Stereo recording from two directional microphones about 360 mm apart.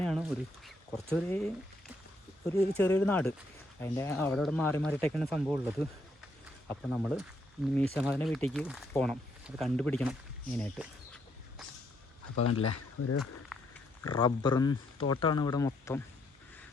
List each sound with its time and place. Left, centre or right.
0.0 s speech: centre
2.5 s speech: centre
9.6 s a sound: centre
12.4 s speech: left
13.5 s dog: centre
14.0 s speech: centre